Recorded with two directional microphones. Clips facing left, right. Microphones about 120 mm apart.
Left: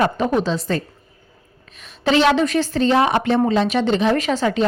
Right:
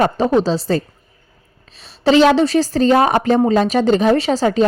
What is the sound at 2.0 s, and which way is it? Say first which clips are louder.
Speech: right 4 dB; 35° right (ahead or behind).